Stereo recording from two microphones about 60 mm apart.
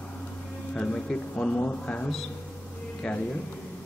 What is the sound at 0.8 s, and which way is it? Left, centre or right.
Speech, centre.